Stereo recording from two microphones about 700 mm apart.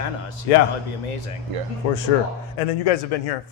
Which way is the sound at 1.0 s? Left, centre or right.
Left.